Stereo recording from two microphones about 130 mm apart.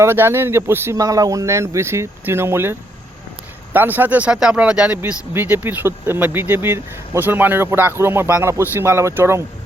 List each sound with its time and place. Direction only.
0.0 s speech: 20° right (ahead or behind)